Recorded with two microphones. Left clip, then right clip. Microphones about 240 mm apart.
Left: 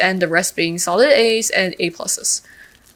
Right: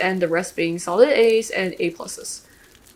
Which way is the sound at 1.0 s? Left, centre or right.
Left.